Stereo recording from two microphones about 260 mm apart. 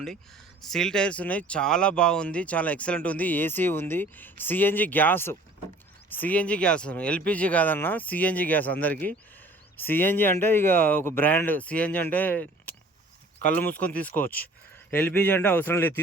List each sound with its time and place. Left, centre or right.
0.6 s speech: centre